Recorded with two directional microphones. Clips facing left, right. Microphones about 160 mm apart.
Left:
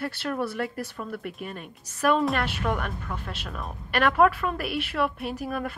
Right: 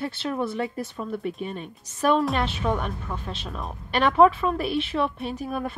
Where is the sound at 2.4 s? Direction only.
25° right (ahead or behind).